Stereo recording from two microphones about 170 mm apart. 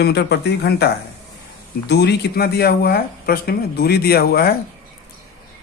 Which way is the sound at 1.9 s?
70° left (ahead or behind).